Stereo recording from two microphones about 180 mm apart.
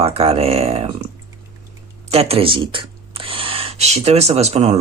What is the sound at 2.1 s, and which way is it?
Speech, 35° right (ahead or behind).